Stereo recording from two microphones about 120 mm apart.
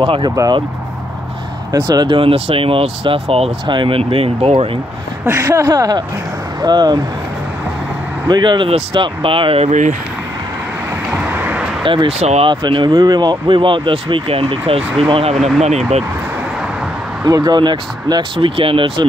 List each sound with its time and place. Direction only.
0.0 s speech: 40° right (ahead or behind)
1.7 s speech: 35° right (ahead or behind); by 3.5 s 55° right (ahead or behind)
3.6 s speech: 40° right (ahead or behind)
5.2 s speech: 25° right (ahead or behind)
5.7 s speech: 35° right (ahead or behind)
8.3 s speech: 40° right (ahead or behind)
8.6 s speech: 50° right (ahead or behind)
9.7 s speech: 90° right
11.1 s vehicle: 10° right (ahead or behind)
11.8 s speech: 45° right (ahead or behind)
12.2 s speech: 60° right (ahead or behind)
12.4 s speech: 40° right (ahead or behind)
17.2 s speech: 30° right (ahead or behind)